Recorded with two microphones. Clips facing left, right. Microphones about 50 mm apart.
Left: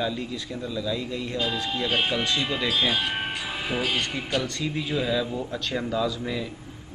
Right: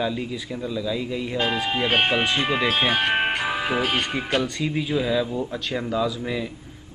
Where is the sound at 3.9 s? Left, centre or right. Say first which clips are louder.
Right 3 dB; right.